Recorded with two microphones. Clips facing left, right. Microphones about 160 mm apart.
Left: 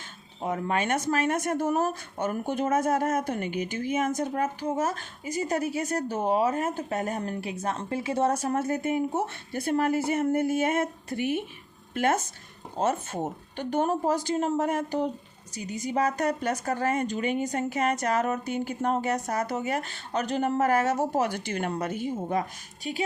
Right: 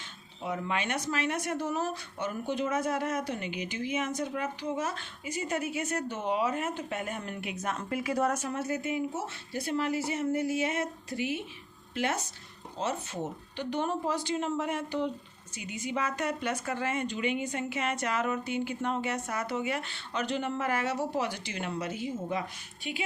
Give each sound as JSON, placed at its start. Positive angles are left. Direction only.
{"t": 0.4, "sound": "a woman's voice", "side_deg": 45}